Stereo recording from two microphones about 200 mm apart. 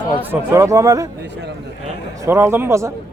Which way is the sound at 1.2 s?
60° right (ahead or behind).